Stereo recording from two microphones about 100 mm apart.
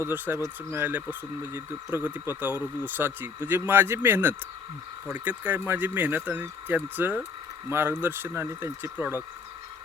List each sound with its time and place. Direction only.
0.0 s speech: 25° right (ahead or behind)